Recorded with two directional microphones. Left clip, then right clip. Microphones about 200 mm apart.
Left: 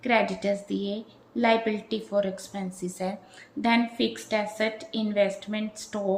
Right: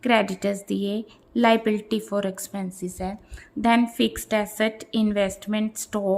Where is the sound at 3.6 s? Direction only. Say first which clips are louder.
Right 4 dB; 40° right (ahead or behind).